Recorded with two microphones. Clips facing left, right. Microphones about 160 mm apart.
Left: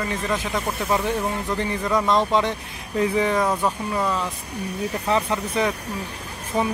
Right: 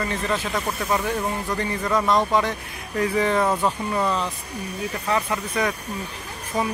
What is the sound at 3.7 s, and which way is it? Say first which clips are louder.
Speech: right 1 dB; 5° left (ahead or behind).